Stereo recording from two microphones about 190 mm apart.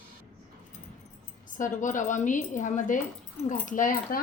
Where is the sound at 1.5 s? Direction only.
45° left (ahead or behind).